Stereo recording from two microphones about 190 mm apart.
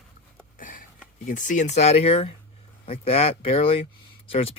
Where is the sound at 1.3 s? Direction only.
45° left (ahead or behind).